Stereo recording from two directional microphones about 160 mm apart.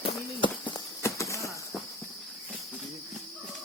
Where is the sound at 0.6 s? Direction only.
20° left (ahead or behind).